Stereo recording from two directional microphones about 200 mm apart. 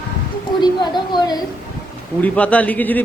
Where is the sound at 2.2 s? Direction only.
5° left (ahead or behind).